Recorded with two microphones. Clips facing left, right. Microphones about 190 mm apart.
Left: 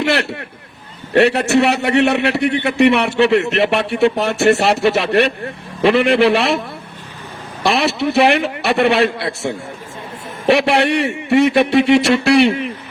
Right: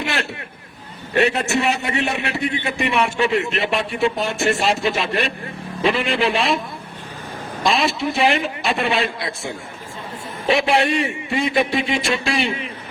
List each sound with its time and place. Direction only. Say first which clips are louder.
0.0 s a man's voice: left 7 dB; 70° left (ahead or behind)
7.6 s a man's voice: left 3 dB; 70° left (ahead or behind)
10.5 s a man's voice: left 4 dB; 70° left (ahead or behind)